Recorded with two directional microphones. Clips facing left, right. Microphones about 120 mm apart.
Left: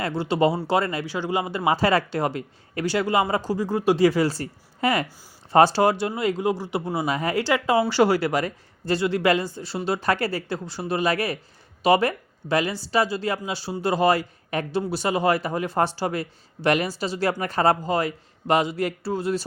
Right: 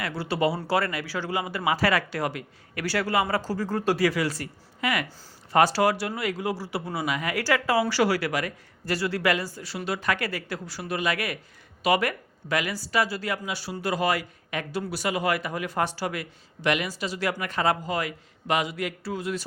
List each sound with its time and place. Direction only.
0.0 s speech: 25° left (ahead or behind)
4.0 s speech: 30° left (ahead or behind)